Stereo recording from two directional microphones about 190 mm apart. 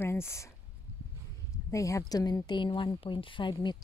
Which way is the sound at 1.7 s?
15° left (ahead or behind).